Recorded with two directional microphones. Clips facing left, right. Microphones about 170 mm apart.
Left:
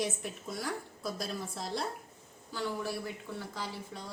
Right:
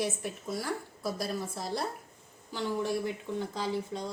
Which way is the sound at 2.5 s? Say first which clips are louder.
Right 4 dB; 20° right (ahead or behind).